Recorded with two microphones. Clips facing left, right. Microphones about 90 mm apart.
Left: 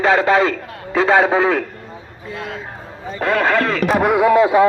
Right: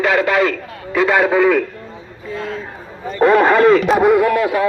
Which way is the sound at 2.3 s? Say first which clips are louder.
Right 3 dB; 10° left (ahead or behind).